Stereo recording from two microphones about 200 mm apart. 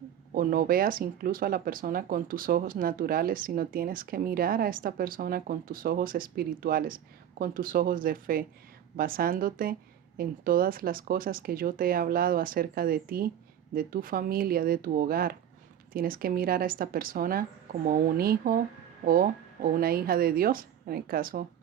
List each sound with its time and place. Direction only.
0.3 s speech: 45° right (ahead or behind)